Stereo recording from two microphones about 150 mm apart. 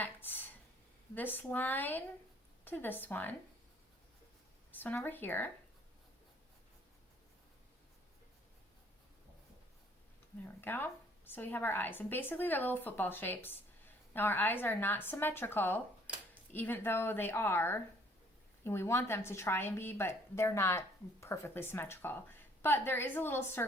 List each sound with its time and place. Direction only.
0.0 s a sound: 15° left (ahead or behind)
1.1 s a woman's voice: 10° left (ahead or behind)
4.7 s a woman's voice: 10° left (ahead or behind)
10.4 s a woman's voice: 15° left (ahead or behind)